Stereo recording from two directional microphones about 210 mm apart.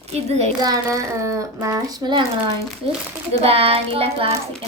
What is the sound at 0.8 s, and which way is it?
Speech, 15° right (ahead or behind).